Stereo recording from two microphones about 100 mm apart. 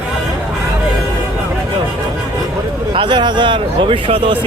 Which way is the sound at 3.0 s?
50° right (ahead or behind).